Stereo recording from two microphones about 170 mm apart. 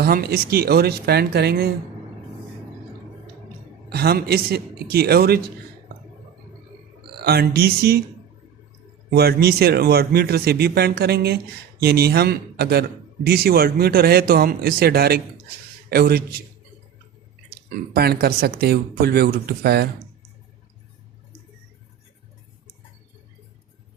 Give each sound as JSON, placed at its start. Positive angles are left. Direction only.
{"t": 0.0, "sound": "a man's voice", "side_deg": -60}
{"t": 3.8, "sound": "speech", "side_deg": -70}
{"t": 7.2, "sound": "a man's voice", "side_deg": -65}
{"t": 9.0, "sound": "a man's voice", "side_deg": -70}
{"t": 17.5, "sound": "speech", "side_deg": -65}